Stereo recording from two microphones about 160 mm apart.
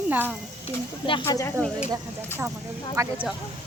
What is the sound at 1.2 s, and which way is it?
Speech, 20° left (ahead or behind).